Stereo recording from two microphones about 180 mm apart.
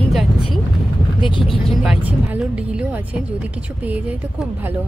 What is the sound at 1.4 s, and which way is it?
A woman's voice, 5° right (ahead or behind).